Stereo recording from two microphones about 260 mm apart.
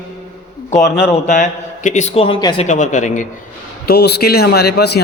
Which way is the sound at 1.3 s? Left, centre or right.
Left.